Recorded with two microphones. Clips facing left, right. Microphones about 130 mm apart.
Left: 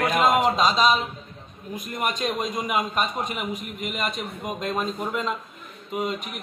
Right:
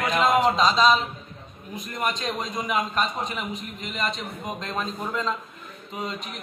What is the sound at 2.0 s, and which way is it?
A man's voice, 15° left (ahead or behind).